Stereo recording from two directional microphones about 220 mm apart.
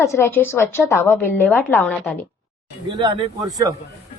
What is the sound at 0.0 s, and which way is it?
A woman's voice, 10° left (ahead or behind).